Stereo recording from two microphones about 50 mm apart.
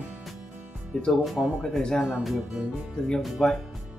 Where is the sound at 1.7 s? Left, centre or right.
Centre.